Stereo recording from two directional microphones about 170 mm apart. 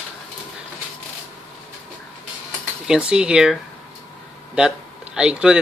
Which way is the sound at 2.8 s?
5° right (ahead or behind).